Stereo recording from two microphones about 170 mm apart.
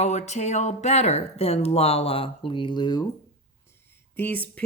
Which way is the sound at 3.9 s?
10° left (ahead or behind).